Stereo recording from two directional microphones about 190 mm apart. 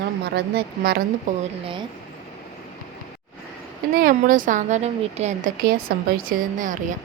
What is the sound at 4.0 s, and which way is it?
A woman's voice, 45° right (ahead or behind).